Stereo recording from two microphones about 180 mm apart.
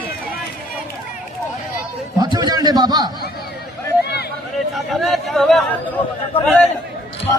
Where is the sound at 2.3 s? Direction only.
20° right (ahead or behind).